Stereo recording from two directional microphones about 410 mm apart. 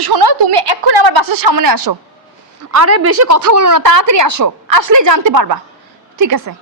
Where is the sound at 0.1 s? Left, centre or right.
Right.